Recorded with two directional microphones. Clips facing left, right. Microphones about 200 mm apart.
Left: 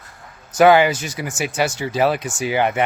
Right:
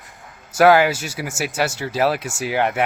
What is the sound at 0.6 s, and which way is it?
Speech, 5° right (ahead or behind).